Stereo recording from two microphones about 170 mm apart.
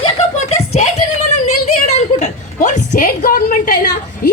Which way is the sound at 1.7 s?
45° left (ahead or behind).